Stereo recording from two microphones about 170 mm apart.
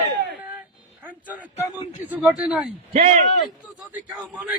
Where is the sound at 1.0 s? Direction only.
10° right (ahead or behind).